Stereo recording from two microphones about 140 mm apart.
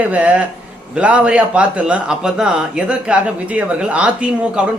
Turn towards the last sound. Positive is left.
turn(degrees=-10)  # may be behind; listen again after turning